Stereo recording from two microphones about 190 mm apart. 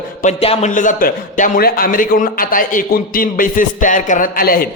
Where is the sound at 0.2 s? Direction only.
35° left (ahead or behind).